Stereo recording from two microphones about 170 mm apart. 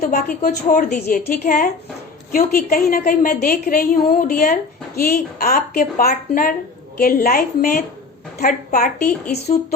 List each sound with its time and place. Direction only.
0.0 s a woman's voice: 55° left (ahead or behind)
4.9 s a woman's voice: 65° left (ahead or behind)